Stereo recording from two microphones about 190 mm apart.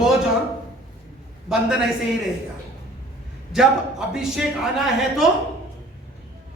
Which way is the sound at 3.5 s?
Centre (ahead or behind).